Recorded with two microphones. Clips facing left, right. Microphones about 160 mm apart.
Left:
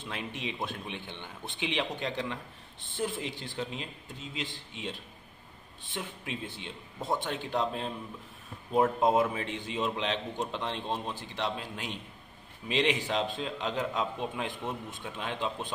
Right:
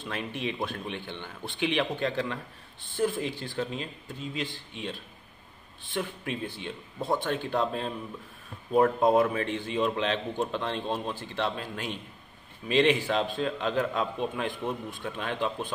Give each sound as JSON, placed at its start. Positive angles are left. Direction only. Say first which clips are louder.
{"t": 0.0, "sound": "a man's voice", "louder": "right 4 dB", "side_deg": 20}